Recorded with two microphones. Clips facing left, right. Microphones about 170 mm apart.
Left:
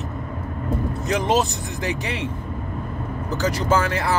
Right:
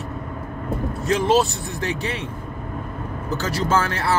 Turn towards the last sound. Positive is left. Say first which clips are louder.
# even
turn(degrees=15)  # may be behind; listen again after turning